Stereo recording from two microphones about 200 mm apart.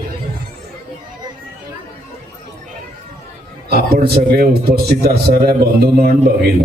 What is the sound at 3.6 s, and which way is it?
A man's voice, 50° right (ahead or behind).